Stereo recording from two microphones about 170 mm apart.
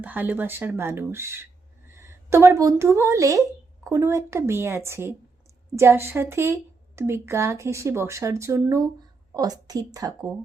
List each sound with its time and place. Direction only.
0.0 s a woman's voice: 10° right (ahead or behind)